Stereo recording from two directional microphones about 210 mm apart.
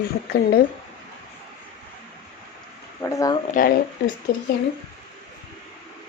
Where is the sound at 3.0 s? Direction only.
15° left (ahead or behind).